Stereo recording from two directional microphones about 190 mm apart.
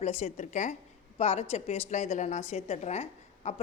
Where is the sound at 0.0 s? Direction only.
35° left (ahead or behind).